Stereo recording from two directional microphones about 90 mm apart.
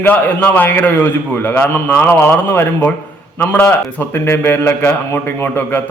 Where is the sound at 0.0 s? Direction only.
20° left (ahead or behind).